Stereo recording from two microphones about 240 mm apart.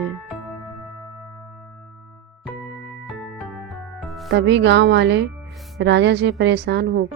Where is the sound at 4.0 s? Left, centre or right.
Centre.